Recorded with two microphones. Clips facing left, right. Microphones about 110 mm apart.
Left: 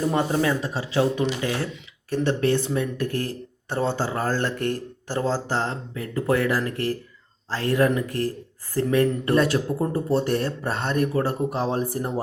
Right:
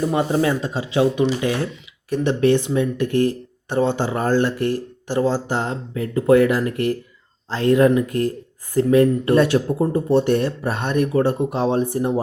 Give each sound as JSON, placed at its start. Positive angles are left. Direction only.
{"t": 0.1, "sound": "speech", "side_deg": -20}